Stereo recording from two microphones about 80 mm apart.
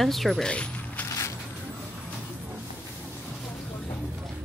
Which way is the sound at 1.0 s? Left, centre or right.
Left.